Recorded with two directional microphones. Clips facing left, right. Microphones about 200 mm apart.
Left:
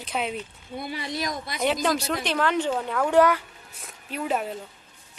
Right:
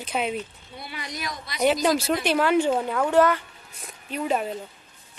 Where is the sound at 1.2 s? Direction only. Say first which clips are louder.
Left 4 dB; 50° left (ahead or behind).